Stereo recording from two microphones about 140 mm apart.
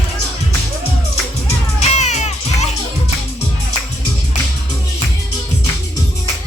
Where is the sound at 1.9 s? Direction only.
55° left (ahead or behind).